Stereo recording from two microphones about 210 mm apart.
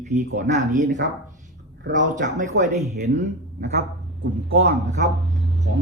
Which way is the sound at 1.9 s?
35° right (ahead or behind).